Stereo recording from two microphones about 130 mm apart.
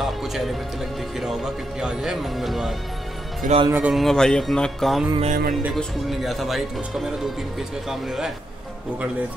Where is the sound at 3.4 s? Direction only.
85° right.